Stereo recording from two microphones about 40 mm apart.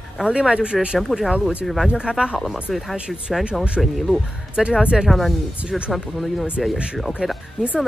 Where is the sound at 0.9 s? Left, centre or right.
Centre.